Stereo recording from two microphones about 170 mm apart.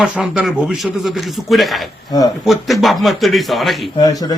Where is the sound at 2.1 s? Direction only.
25° left (ahead or behind).